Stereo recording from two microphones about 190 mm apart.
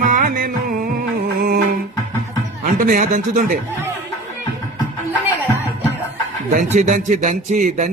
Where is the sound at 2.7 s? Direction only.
40° right (ahead or behind).